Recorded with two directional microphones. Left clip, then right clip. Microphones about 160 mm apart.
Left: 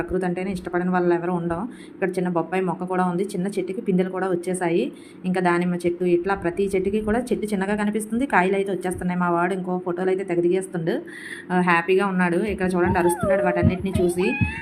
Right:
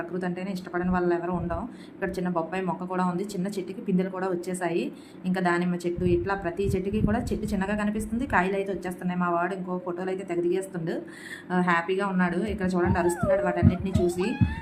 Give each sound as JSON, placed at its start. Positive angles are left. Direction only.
{"t": 0.1, "sound": "speech", "side_deg": 25}
{"t": 14.1, "sound": "speech", "side_deg": 50}